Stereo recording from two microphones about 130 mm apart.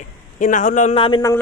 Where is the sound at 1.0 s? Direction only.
40° left (ahead or behind).